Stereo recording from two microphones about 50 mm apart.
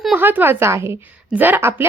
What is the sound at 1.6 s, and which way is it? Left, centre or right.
Speech, right.